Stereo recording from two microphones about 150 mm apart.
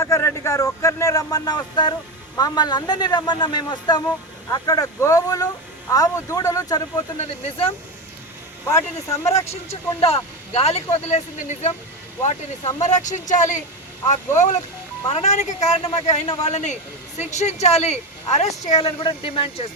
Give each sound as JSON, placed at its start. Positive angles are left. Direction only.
{"t": 0.0, "sound": "speech", "side_deg": 20}
{"t": 7.2, "sound": "speech", "side_deg": 40}
{"t": 9.5, "sound": "a woman's voice", "side_deg": 45}
{"t": 12.8, "sound": "a woman's voice", "side_deg": 55}